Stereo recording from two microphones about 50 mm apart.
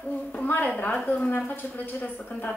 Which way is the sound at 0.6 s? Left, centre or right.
Left.